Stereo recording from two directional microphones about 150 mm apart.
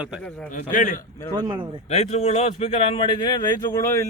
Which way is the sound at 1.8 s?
45° left (ahead or behind).